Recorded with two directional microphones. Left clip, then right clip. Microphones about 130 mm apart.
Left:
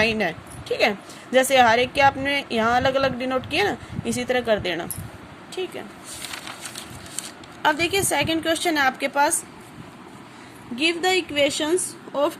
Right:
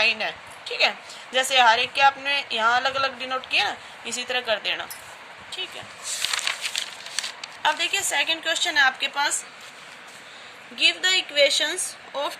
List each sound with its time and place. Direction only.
0.0 s a woman's voice: 65° left (ahead or behind)
7.6 s a woman's voice: 65° left (ahead or behind)
10.8 s a woman's voice: 45° left (ahead or behind)